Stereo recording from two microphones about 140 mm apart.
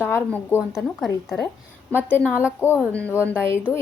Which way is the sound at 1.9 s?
15° left (ahead or behind).